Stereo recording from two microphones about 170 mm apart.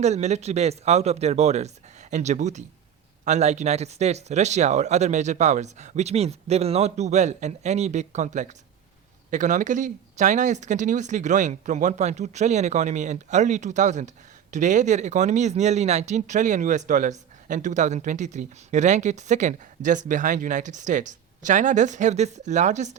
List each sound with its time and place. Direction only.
0.0 s speech: 40° right (ahead or behind)